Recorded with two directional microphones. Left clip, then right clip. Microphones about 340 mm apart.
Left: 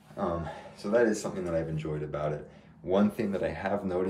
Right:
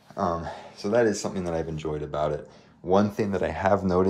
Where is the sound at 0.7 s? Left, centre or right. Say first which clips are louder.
Right 3 dB; right.